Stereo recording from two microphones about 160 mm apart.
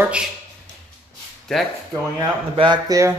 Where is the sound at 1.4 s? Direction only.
Centre (ahead or behind).